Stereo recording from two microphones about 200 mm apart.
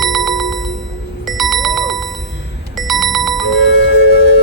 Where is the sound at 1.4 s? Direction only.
Centre (ahead or behind).